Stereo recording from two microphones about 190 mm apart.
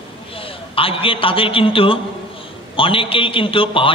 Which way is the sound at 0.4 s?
30° left (ahead or behind).